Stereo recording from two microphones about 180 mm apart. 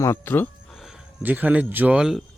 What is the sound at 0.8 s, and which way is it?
Speech, 5° right (ahead or behind).